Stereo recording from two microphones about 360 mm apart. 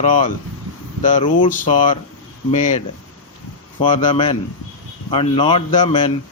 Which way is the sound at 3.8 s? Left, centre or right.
Centre.